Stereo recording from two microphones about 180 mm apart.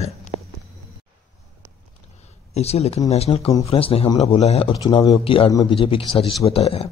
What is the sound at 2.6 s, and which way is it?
A man's voice, 35° left (ahead or behind).